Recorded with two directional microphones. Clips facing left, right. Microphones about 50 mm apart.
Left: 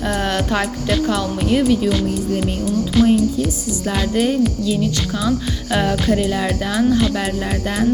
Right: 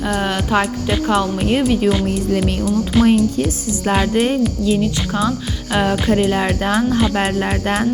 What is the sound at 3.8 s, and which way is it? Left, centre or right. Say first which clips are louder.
Speech: right 3 dB; right.